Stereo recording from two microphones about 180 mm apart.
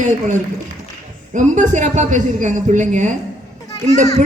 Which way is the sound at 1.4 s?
45° right (ahead or behind).